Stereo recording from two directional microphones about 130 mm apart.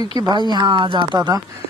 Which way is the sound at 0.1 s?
35° right (ahead or behind).